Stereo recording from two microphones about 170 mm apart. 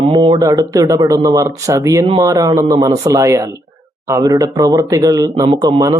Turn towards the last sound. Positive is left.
turn(degrees=-20)  # may be behind; listen again after turning